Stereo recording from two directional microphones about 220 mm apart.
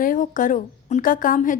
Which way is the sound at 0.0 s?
40° left (ahead or behind).